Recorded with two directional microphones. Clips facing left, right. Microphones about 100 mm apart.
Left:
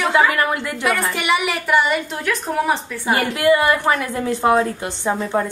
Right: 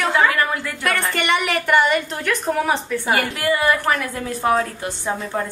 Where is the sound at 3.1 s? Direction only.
20° left (ahead or behind).